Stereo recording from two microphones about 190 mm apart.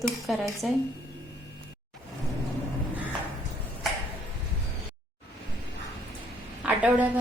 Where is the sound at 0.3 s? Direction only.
Centre (ahead or behind).